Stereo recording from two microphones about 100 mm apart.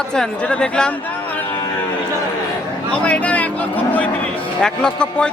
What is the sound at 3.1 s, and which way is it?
Speech, 15° left (ahead or behind).